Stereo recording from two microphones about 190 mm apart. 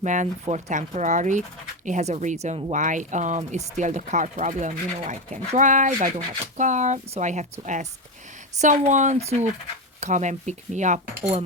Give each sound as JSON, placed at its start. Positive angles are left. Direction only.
{"t": 0.0, "sound": "speech", "side_deg": -40}